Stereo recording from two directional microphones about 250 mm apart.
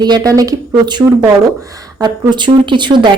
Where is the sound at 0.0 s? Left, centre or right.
Centre.